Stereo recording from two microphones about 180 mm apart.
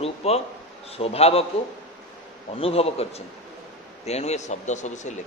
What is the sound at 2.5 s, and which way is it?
Speech, 30° left (ahead or behind).